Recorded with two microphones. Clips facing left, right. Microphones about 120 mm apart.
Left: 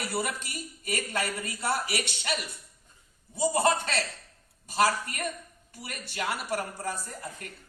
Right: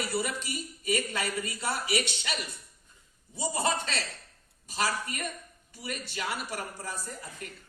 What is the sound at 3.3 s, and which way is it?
A woman's voice, 50° left (ahead or behind).